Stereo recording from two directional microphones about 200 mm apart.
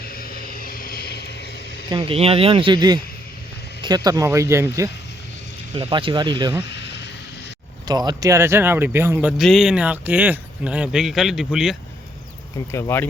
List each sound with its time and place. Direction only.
0.0 s vehicle: 50° left (ahead or behind)
1.9 s speech: 30° right (ahead or behind)
5.7 s speech: 25° right (ahead or behind)
6.6 s a sound: 60° left (ahead or behind)
7.9 s speech: 20° right (ahead or behind); by 11.8 s centre (ahead or behind)
12.7 s speech: 10° left (ahead or behind)